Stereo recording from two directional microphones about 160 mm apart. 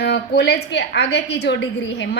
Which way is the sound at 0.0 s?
90° left.